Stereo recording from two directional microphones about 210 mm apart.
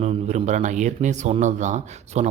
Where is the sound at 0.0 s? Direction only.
30° right (ahead or behind).